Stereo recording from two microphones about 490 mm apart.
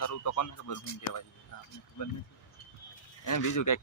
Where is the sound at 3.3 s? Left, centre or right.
Left.